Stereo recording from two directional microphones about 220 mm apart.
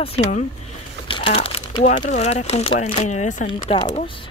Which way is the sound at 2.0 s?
30° left (ahead or behind).